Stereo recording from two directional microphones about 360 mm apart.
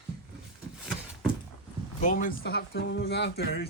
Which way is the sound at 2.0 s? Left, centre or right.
Left.